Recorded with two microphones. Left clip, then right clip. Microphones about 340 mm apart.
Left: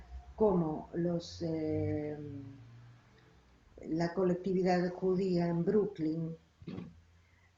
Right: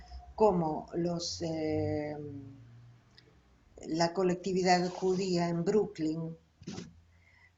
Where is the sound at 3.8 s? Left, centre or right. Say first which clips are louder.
Right 3 dB; right.